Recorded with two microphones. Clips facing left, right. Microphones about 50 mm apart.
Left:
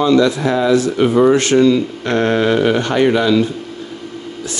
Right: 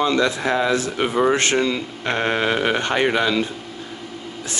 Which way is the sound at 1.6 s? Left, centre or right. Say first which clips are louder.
Left 9 dB; centre.